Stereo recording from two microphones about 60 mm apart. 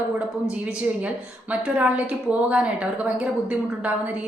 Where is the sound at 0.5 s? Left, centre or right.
Right.